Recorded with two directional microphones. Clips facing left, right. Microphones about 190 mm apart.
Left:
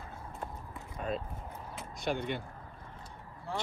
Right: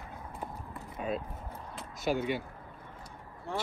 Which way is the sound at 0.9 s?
5° right (ahead or behind).